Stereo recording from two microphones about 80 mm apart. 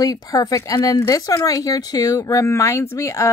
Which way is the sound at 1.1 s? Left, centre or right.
Left.